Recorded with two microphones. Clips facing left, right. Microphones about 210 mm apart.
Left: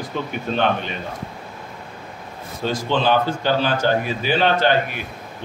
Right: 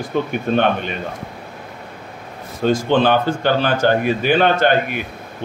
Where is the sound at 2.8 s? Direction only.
55° right (ahead or behind).